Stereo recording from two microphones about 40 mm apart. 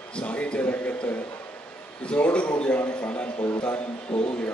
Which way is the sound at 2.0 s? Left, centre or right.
Left.